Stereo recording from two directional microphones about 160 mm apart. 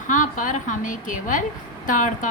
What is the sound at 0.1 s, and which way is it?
A woman's voice, 55° left (ahead or behind).